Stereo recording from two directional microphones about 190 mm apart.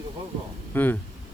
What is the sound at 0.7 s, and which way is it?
Speech, 10° left (ahead or behind).